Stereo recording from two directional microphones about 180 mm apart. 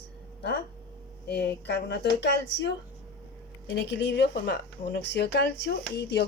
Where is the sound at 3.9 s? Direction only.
70° left (ahead or behind).